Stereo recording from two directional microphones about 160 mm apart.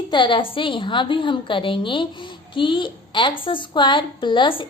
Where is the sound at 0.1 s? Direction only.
30° left (ahead or behind).